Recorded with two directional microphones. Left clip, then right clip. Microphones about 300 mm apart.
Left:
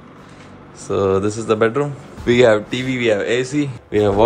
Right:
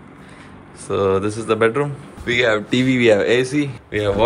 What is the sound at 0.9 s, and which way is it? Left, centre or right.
A man's voice, centre.